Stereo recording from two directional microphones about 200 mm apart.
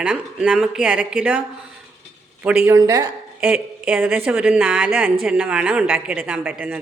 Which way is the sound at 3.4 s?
5° right (ahead or behind).